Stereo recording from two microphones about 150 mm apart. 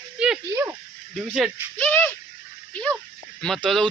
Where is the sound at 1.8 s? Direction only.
15° left (ahead or behind).